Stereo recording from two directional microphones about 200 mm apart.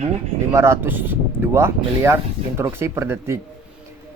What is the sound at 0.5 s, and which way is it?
Speech, 10° right (ahead or behind).